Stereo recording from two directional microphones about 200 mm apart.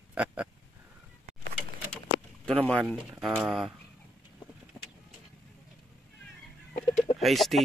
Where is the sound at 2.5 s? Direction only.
5° left (ahead or behind).